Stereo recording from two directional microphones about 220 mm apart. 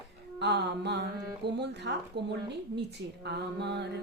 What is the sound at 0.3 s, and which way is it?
Music, 50° right (ahead or behind).